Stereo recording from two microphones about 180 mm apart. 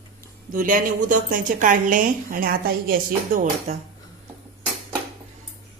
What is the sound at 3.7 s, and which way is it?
Speech, 40° right (ahead or behind).